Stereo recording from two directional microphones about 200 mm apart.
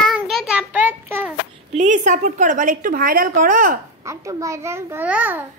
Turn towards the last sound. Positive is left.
turn(degrees=-10)  # may be behind; listen again after turning